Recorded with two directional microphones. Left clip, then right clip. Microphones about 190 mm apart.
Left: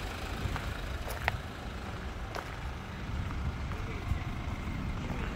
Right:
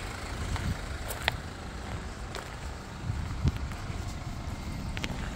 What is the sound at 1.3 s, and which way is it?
Vehicle, centre (ahead or behind).